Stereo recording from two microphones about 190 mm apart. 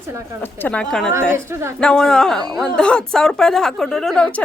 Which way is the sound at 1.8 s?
5° left (ahead or behind).